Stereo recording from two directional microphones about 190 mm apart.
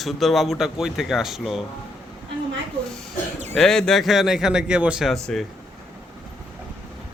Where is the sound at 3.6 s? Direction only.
5° left (ahead or behind).